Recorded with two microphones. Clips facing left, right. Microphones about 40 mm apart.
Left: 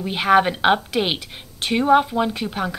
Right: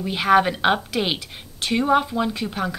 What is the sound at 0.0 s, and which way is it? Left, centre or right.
A woman's voice, centre.